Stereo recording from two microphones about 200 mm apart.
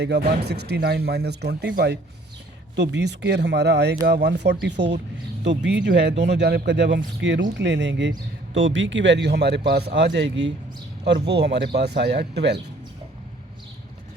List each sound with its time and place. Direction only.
0.0 s speech: 55° right (ahead or behind)